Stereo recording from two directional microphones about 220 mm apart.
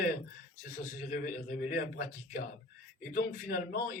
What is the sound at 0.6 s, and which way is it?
A man's voice, 40° left (ahead or behind).